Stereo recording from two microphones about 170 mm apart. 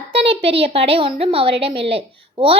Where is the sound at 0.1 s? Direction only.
35° right (ahead or behind).